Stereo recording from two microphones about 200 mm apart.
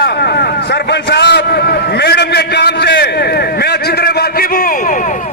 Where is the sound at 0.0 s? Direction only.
55° left (ahead or behind).